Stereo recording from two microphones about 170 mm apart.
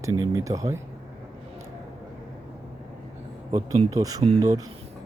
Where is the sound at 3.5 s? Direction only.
20° right (ahead or behind).